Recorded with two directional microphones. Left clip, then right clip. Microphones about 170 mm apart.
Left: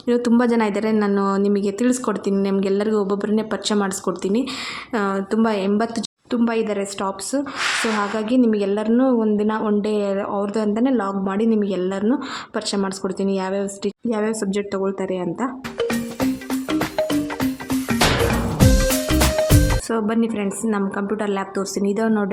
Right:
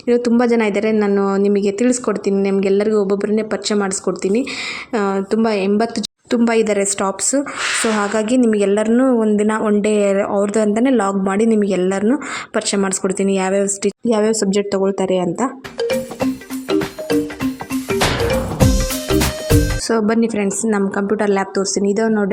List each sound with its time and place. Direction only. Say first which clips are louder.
0.1 s a woman's voice: right 4 dB; 10° right (ahead or behind)
15.9 s music: right 4 dB; centre (ahead or behind)
19.9 s a woman's voice: right 8 dB; 25° right (ahead or behind)